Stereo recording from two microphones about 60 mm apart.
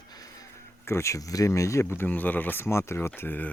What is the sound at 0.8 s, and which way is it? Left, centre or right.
Speech, left.